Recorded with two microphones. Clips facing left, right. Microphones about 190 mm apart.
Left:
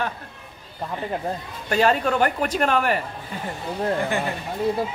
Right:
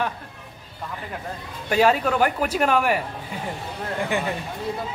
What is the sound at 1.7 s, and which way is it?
Speech, 5° right (ahead or behind).